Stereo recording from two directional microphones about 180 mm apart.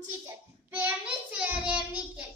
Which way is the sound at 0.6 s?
10° right (ahead or behind).